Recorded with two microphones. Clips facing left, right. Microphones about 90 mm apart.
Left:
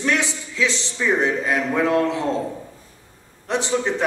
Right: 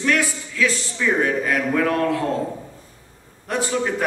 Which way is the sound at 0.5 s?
20° left (ahead or behind).